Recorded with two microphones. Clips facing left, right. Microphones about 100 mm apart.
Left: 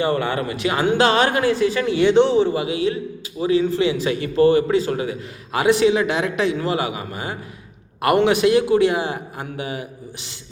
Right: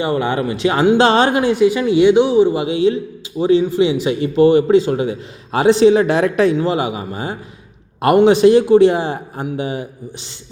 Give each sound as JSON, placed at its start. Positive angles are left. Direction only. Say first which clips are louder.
{"t": 0.0, "sound": "a man's voice", "louder": "right 3 dB", "side_deg": -20}
{"t": 3.6, "sound": "a man's voice", "louder": "right 4 dB", "side_deg": -20}
{"t": 6.6, "sound": "a man's voice", "louder": "right 4 dB", "side_deg": -25}